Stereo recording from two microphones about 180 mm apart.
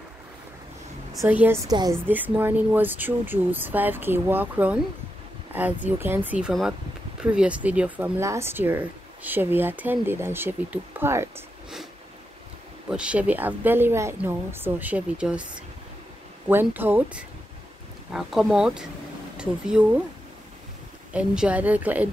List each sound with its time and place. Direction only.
1.2 s a woman's voice: 10° right (ahead or behind)
2.0 s speech: 10° right (ahead or behind)
12.9 s speech: 5° right (ahead or behind)
21.1 s speech: 5° right (ahead or behind)